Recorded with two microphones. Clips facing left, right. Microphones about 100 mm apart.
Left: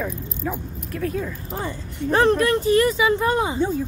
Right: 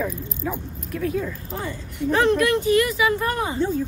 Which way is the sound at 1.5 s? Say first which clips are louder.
Left 1 dB; 35° left (ahead or behind).